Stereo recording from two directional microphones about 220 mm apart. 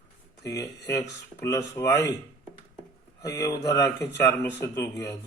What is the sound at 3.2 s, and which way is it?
Speech, 15° left (ahead or behind).